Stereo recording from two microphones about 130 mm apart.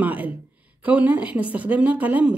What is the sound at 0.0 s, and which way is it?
A woman's voice, 10° right (ahead or behind).